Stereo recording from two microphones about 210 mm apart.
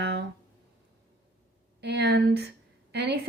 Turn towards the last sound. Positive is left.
turn(degrees=-55)  # may be behind; listen again after turning